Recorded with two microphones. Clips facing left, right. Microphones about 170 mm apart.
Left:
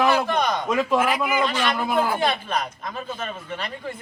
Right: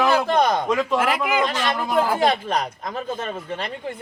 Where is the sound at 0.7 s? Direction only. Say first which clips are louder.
Even; 5° left (ahead or behind).